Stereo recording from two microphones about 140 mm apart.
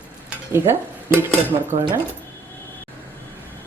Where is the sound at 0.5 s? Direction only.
20° right (ahead or behind).